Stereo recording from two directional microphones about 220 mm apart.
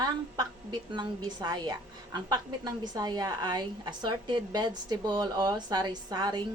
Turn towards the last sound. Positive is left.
turn(degrees=-20)  # may be behind; listen again after turning